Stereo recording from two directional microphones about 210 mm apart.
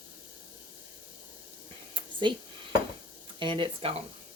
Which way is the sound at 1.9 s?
25° right (ahead or behind).